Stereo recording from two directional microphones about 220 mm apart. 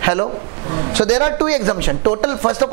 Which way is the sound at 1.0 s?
20° right (ahead or behind).